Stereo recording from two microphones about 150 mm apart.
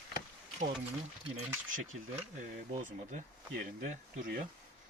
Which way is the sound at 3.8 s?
60° right (ahead or behind).